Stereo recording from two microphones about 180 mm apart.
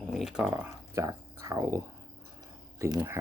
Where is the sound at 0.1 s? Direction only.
Centre (ahead or behind).